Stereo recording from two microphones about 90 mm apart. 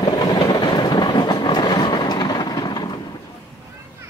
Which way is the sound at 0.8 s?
50° left (ahead or behind).